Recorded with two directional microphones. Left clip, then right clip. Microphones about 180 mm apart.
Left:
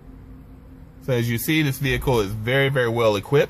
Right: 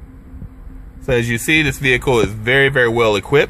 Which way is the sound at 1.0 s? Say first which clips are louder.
Right 7 dB; 30° right (ahead or behind).